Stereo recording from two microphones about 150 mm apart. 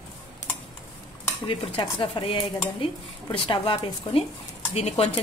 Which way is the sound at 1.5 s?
40° left (ahead or behind).